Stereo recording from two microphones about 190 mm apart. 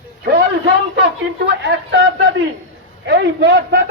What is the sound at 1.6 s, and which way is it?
A man's voice, 75° right (ahead or behind).